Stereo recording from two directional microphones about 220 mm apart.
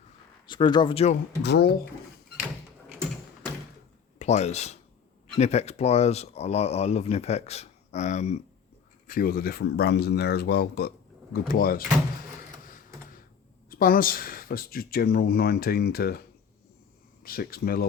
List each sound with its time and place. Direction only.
0.4 s speech: 20° left (ahead or behind)
1.4 s speech: 50° left (ahead or behind)
4.2 s speech: 30° left (ahead or behind)
13.7 s speech: 40° left (ahead or behind)
17.2 s speech: 40° left (ahead or behind)